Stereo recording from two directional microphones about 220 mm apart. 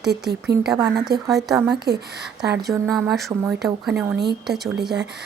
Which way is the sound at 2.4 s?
50° right (ahead or behind).